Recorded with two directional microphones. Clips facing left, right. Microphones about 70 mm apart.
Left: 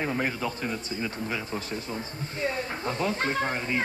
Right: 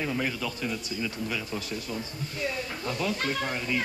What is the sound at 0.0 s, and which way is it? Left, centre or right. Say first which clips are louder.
Speech: left 2 dB; left.